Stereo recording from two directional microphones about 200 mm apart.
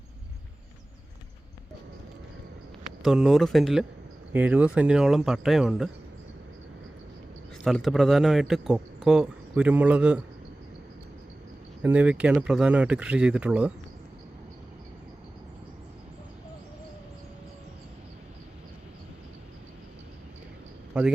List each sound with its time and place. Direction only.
3.0 s speech: centre (ahead or behind)
7.6 s speech: centre (ahead or behind)
11.8 s speech: 5° right (ahead or behind)
20.9 s a man's voice: 5° right (ahead or behind)